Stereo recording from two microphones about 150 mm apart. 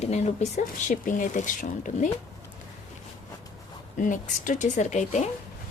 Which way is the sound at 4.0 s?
60° left (ahead or behind).